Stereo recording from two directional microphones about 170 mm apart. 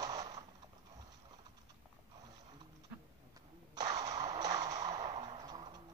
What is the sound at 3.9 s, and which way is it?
Music, 20° right (ahead or behind).